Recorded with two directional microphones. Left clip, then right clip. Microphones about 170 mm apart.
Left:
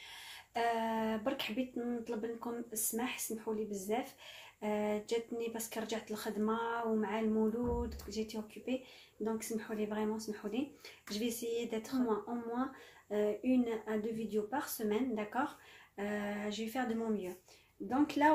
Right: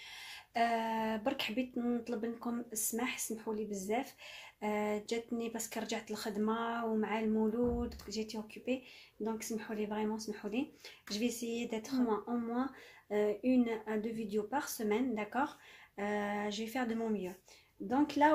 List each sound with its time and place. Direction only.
0.1 s speech: 35° right (ahead or behind)